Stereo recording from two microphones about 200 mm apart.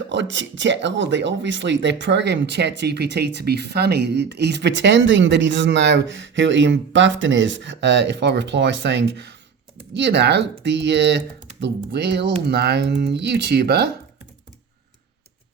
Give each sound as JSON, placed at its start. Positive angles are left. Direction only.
{"t": 0.1, "sound": "speech", "side_deg": -65}